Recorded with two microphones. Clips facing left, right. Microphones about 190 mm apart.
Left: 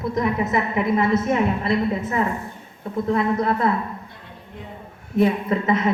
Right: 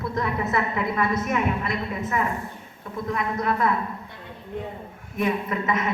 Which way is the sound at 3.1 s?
30° left (ahead or behind).